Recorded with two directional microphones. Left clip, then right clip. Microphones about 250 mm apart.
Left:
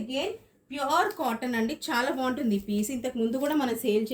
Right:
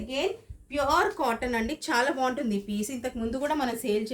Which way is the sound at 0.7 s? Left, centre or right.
Right.